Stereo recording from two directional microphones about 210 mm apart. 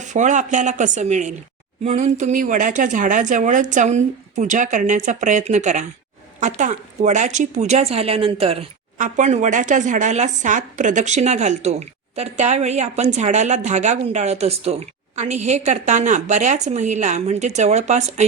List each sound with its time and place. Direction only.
0.0 s speech: 35° right (ahead or behind)